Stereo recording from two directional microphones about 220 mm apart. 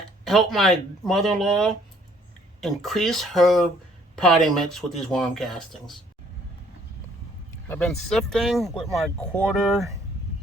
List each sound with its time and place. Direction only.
0.3 s speech: centre (ahead or behind)
7.7 s speech: 5° left (ahead or behind)